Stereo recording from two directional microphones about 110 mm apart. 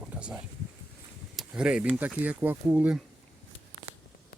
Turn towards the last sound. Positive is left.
turn(degrees=-10)  # may be behind; listen again after turning